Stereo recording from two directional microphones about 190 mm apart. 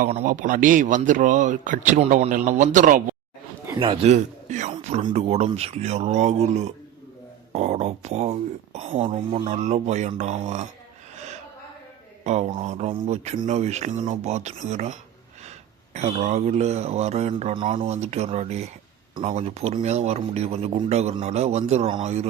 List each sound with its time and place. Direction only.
0.0 s speech: 40° right (ahead or behind)
3.8 s a man's voice: 25° right (ahead or behind)
4.1 s a sound: 40° right (ahead or behind)
4.8 s speech: 35° right (ahead or behind)
12.2 s speech: 35° right (ahead or behind)